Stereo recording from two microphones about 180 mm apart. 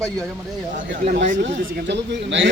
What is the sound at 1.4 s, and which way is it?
A man's voice, 80° right.